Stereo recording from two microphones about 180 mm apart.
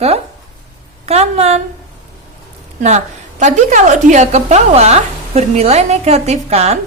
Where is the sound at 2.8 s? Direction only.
40° right (ahead or behind).